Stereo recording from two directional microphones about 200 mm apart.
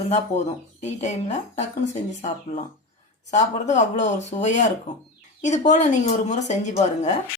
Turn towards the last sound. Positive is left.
turn(degrees=35)  # may be behind; listen again after turning